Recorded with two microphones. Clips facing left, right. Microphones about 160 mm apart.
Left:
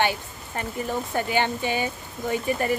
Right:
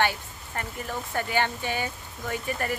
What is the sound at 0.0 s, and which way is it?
Speech, 20° left (ahead or behind).